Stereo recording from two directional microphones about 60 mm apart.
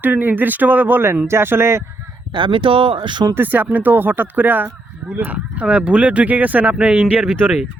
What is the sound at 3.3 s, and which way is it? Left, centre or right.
Speech, right.